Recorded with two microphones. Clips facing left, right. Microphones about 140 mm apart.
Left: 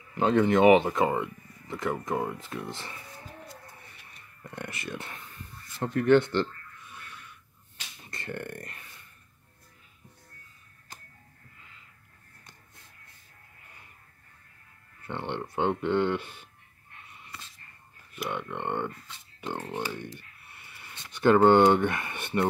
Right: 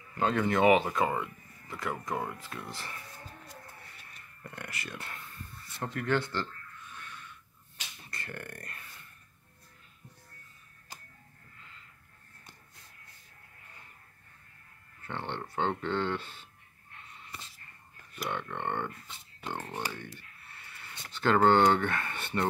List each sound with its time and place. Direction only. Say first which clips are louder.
0.2 s speech: left 5 dB; 20° left (ahead or behind)
4.4 s speech: left 4 dB; 25° left (ahead or behind)
8.1 s speech: left 7 dB; 25° left (ahead or behind)
15.0 s speech: left 4 dB; 15° left (ahead or behind)
18.1 s speech: left 2 dB; 5° left (ahead or behind)